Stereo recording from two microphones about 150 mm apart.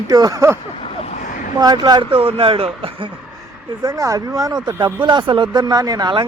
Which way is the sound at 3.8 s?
25° right (ahead or behind).